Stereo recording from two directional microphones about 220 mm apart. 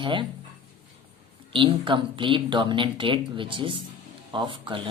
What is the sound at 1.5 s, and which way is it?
A woman's voice, 20° right (ahead or behind).